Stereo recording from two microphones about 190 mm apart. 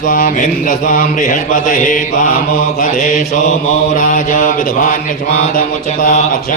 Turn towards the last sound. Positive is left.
turn(degrees=45)  # may be behind; listen again after turning